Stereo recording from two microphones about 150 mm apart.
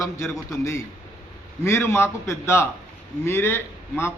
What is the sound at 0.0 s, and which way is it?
A man's voice, 15° left (ahead or behind).